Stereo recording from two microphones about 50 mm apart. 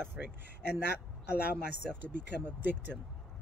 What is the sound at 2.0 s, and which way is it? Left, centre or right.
Speech, right.